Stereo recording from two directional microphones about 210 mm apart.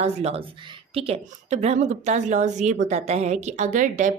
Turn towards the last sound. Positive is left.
turn(degrees=-35)  # may be behind; listen again after turning